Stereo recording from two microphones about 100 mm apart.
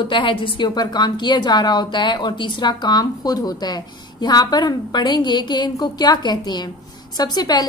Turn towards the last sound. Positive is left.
turn(degrees=45)  # may be behind; listen again after turning